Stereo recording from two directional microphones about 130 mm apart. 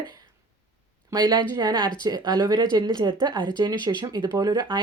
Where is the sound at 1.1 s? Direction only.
30° right (ahead or behind).